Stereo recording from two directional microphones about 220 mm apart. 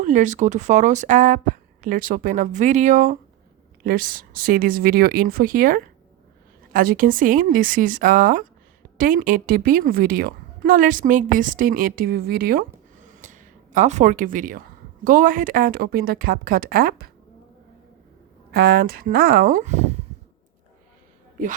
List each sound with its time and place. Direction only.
0.0 s a woman's voice: 35° right (ahead or behind)
18.5 s speech: 45° right (ahead or behind)